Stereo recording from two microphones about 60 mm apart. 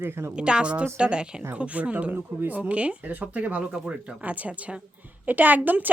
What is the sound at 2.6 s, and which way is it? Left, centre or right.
A woman's voice, right.